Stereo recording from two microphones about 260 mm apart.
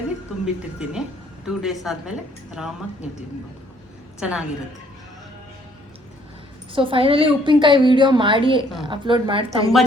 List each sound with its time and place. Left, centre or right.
0.4 s a woman's voice: centre
4.2 s a woman's voice: centre
6.7 s a woman's voice: centre